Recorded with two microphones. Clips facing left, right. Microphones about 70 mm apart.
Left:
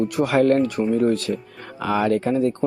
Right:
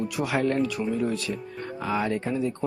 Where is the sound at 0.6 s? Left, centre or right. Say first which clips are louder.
Left 7 dB; left.